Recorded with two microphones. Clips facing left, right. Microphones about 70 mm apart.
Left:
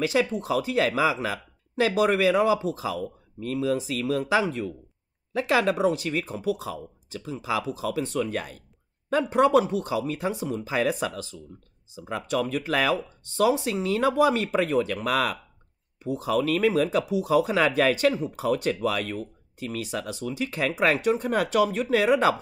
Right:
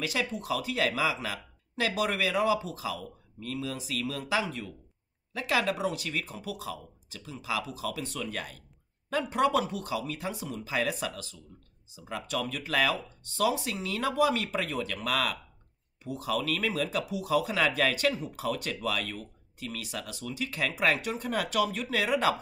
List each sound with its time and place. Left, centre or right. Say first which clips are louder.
0.0 s speech: left 8 dB; left